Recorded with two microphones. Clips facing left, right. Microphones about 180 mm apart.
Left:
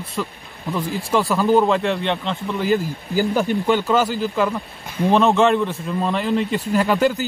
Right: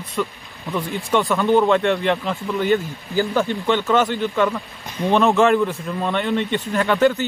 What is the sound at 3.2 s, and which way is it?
A man's voice, 15° left (ahead or behind).